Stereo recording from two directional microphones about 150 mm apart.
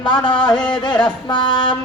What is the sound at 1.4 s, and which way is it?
Music, 30° left (ahead or behind).